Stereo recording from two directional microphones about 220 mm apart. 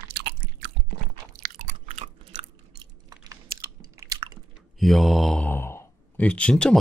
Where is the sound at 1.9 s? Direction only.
30° right (ahead or behind).